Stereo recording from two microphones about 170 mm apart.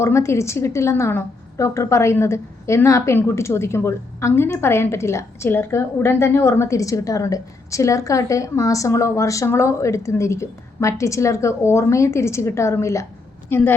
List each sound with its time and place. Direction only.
0.0 s a woman's voice: 15° left (ahead or behind)